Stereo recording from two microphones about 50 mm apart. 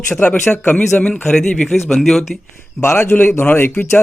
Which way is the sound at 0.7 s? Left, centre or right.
Left.